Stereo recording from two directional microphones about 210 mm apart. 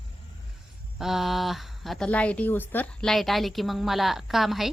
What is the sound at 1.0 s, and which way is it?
Speech, centre (ahead or behind).